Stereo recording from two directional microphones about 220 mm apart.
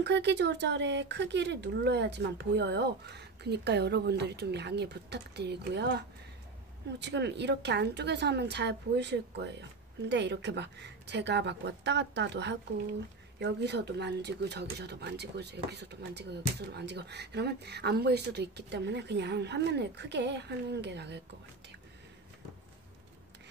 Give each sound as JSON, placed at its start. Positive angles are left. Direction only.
{"t": 0.0, "sound": "speech", "side_deg": -50}